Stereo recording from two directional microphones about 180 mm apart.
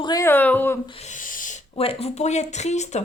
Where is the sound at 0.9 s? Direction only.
35° left (ahead or behind).